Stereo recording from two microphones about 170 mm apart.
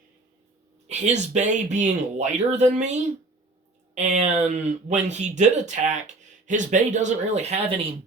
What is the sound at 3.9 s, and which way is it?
Speech, 40° right (ahead or behind).